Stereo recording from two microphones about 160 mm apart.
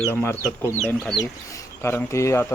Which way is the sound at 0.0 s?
15° left (ahead or behind).